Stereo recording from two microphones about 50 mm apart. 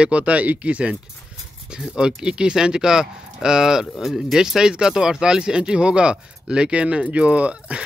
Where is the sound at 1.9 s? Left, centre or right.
Centre.